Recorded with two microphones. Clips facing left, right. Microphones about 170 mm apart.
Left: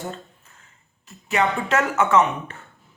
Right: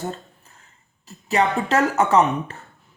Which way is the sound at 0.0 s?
35° right (ahead or behind).